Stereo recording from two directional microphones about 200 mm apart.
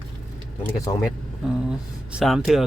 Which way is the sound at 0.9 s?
20° left (ahead or behind).